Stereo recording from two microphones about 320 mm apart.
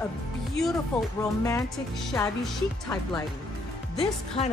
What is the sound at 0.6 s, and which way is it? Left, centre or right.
Speech, centre.